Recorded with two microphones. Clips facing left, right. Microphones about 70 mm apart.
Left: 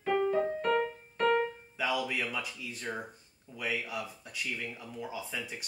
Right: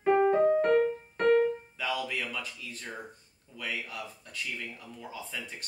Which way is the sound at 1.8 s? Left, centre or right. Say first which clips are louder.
Left 3 dB; centre.